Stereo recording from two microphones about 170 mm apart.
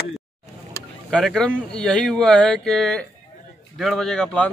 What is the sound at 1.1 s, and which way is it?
A man's voice, centre (ahead or behind).